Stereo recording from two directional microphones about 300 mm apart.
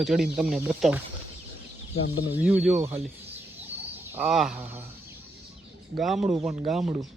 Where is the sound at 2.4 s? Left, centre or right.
Centre.